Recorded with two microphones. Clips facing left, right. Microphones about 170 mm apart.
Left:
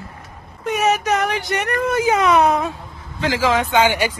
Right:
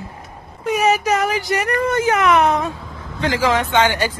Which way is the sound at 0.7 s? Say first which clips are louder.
Right 1 dB; centre (ahead or behind).